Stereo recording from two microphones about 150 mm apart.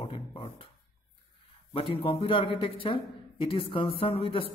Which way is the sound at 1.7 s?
35° left (ahead or behind).